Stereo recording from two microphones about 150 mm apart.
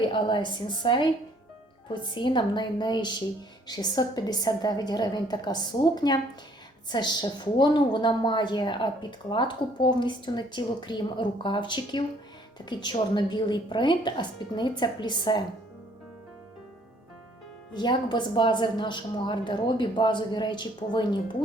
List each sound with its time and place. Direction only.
0.0 s a woman's voice: 30° left (ahead or behind)
17.7 s a woman's voice: 30° left (ahead or behind)